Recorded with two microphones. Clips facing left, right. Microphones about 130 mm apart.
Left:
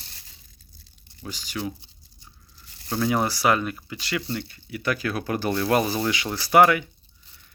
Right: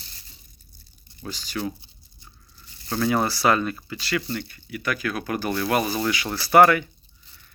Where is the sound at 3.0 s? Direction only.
15° left (ahead or behind).